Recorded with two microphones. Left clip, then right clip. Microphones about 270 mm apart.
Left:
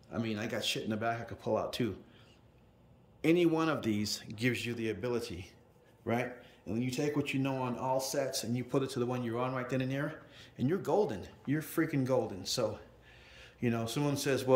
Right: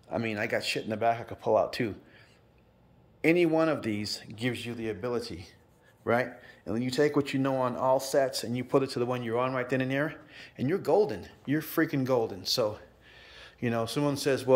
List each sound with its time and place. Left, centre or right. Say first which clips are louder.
0.1 s speech: right 7 dB; centre
3.2 s speech: right 4 dB; centre
3.9 s speech: right 2 dB; left
4.2 s a man's voice: even; centre